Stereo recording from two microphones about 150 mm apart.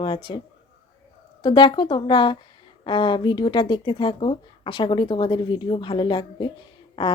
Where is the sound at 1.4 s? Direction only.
30° left (ahead or behind).